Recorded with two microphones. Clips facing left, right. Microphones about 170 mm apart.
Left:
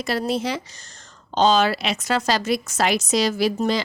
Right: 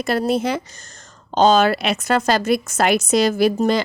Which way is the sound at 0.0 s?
50° right (ahead or behind).